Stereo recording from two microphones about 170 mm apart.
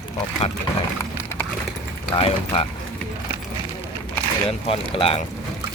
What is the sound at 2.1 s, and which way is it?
Speech, 35° left (ahead or behind).